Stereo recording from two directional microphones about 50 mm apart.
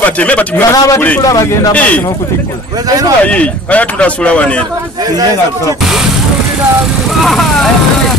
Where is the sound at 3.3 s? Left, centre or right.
Left.